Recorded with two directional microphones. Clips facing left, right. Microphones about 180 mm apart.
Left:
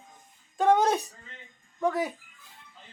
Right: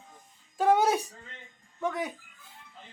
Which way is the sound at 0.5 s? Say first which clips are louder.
Left 1 dB; 5° right (ahead or behind).